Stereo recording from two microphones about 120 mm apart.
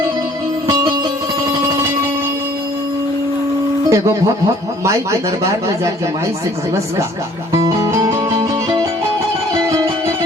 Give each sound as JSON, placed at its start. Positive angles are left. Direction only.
{"t": 3.8, "sound": "speech", "side_deg": -25}
{"t": 7.6, "sound": "music", "side_deg": -25}